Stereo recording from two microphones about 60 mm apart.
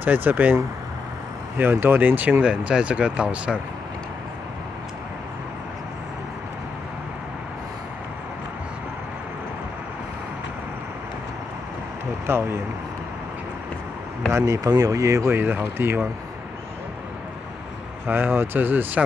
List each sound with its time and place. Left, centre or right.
0.0 s speech: right
1.6 s speech: right
2.4 s speech: centre
12.3 s speech: right
14.4 s speech: right
15.2 s speech: right
18.0 s speech: right